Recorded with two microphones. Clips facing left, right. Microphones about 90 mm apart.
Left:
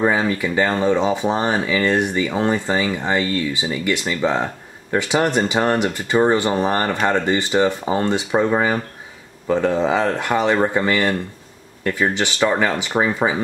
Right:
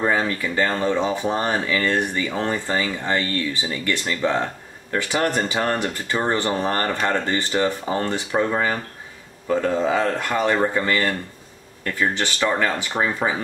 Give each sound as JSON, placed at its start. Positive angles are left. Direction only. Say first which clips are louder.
{"t": 0.0, "sound": "speech", "louder": "left 3 dB", "side_deg": 15}